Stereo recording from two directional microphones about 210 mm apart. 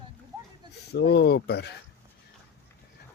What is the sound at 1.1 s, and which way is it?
Speech, 50° left (ahead or behind).